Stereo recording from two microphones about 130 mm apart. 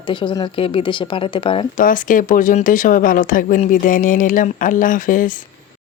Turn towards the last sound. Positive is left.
turn(degrees=90)